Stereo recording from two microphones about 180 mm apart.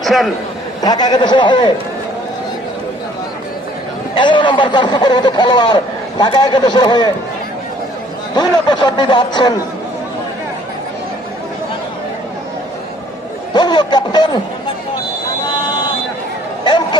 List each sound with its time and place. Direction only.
0.0 s a man's voice: centre (ahead or behind)
0.8 s speech: 25° left (ahead or behind)
4.1 s speech: 25° left (ahead or behind)
8.4 s speech: 25° left (ahead or behind)
13.5 s a sound: 25° left (ahead or behind)
16.6 s a sound: 25° left (ahead or behind)